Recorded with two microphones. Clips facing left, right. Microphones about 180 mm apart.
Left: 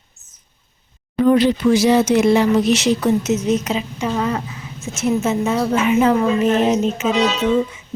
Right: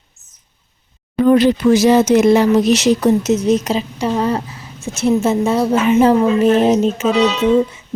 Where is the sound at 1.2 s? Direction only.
50° right (ahead or behind).